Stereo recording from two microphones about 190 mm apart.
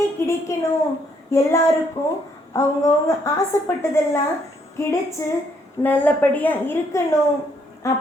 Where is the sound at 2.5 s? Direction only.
15° left (ahead or behind).